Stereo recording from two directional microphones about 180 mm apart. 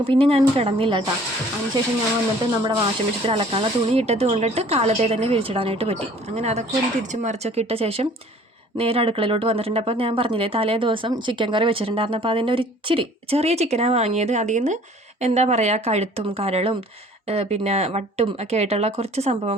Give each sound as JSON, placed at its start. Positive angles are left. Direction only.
{"t": 0.0, "sound": "speech", "side_deg": -30}
{"t": 2.6, "sound": "speech", "side_deg": -30}